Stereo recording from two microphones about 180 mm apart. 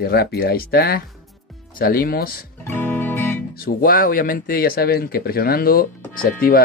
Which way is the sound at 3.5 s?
55° left (ahead or behind).